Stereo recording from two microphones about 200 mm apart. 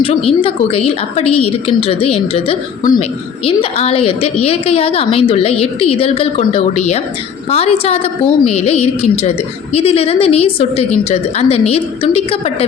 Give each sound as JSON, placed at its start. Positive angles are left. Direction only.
{"t": 0.3, "sound": "a woman's voice", "side_deg": 30}
{"t": 2.8, "sound": "a woman's voice", "side_deg": 40}
{"t": 3.4, "sound": "a woman's voice", "side_deg": 30}